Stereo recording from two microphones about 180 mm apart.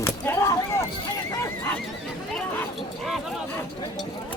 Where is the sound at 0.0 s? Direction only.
15° left (ahead or behind).